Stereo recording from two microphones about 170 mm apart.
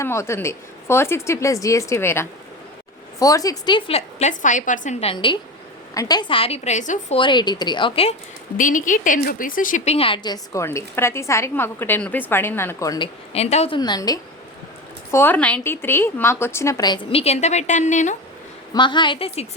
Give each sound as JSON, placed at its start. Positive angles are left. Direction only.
{"t": 0.0, "sound": "a woman's voice", "side_deg": 15}
{"t": 7.2, "sound": "speech", "side_deg": 25}
{"t": 8.5, "sound": "a woman's voice", "side_deg": 50}
{"t": 13.3, "sound": "a woman's voice", "side_deg": 40}
{"t": 13.7, "sound": "speech", "side_deg": 25}
{"t": 15.1, "sound": "a woman's voice", "side_deg": 10}
{"t": 18.7, "sound": "speech", "side_deg": 25}